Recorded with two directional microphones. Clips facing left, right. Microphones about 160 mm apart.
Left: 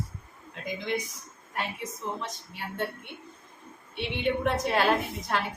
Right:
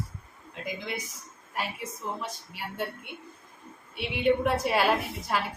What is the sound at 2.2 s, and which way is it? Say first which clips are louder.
Speech: even; 10° right (ahead or behind).